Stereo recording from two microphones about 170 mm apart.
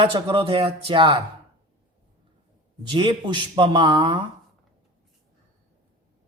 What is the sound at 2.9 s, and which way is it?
A man's voice, 30° right (ahead or behind).